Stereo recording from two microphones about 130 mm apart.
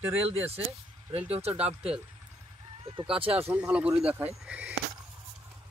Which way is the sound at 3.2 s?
45° right (ahead or behind).